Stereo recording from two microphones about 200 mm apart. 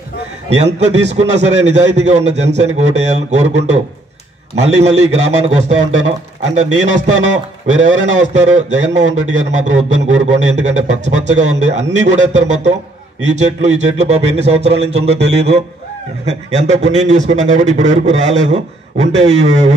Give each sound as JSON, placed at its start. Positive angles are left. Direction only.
{"t": 0.7, "sound": "a man's voice", "side_deg": -35}
{"t": 4.6, "sound": "a man's voice", "side_deg": -35}